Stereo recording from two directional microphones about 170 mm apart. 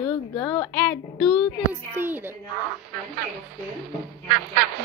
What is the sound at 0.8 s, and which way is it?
Speech, 5° left (ahead or behind).